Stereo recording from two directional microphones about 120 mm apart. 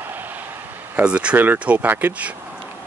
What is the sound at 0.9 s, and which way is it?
Speech, 10° right (ahead or behind).